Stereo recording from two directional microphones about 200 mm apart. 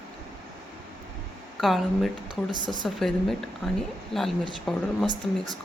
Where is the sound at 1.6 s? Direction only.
Centre (ahead or behind).